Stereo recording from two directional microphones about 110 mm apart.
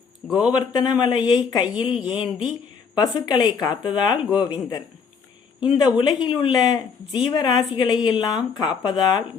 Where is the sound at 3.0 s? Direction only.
40° left (ahead or behind).